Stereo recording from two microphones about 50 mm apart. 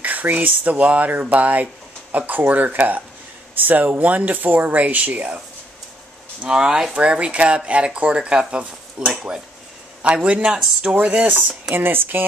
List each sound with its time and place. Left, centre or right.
0.0 s speech: right
6.5 s speech: centre
11.7 s speech: right